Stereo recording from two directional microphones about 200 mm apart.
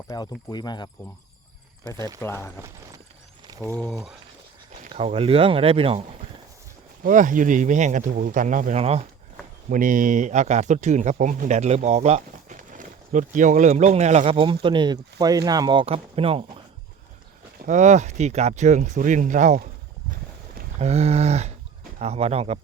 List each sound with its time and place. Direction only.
0.1 s speech: 20° left (ahead or behind)
2.0 s speech: 20° right (ahead or behind)
2.2 s speech: 10° left (ahead or behind)
2.6 s a sound: 15° right (ahead or behind)
3.8 s speech: centre (ahead or behind)
4.9 s speech: 30° right (ahead or behind)
7.0 s speech: 40° right (ahead or behind)
17.6 s speech: 40° right (ahead or behind)
20.7 s speech: 35° right (ahead or behind)